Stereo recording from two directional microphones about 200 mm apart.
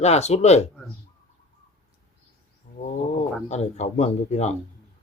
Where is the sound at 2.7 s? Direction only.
40° left (ahead or behind).